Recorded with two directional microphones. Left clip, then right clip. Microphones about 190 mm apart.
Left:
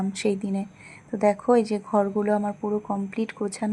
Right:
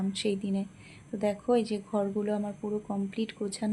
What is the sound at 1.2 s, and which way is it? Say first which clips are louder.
A woman's voice: left 7 dB; 20° left (ahead or behind).